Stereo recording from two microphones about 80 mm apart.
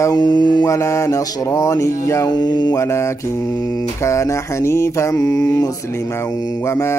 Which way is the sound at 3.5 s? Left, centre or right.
Left.